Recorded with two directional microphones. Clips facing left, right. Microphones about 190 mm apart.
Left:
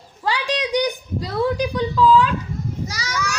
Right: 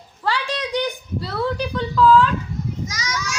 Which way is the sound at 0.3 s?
15° left (ahead or behind).